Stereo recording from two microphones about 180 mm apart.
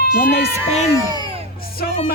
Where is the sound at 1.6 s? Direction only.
55° left (ahead or behind).